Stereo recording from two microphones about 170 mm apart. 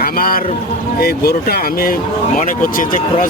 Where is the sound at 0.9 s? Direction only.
65° left (ahead or behind).